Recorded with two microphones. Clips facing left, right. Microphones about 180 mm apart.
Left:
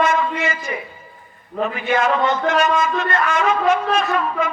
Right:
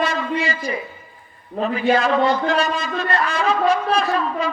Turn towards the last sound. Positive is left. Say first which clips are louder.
# left 1 dB
turn(degrees=-35)  # may be behind; listen again after turning